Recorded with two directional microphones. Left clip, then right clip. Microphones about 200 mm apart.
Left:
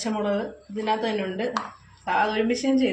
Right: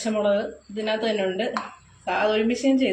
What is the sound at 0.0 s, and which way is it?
Speech, 30° left (ahead or behind).